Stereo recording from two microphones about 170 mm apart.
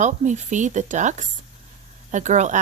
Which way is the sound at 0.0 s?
45° right (ahead or behind).